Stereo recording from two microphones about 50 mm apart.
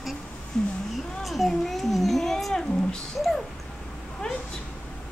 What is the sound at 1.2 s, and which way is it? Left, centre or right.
A child's voice, centre.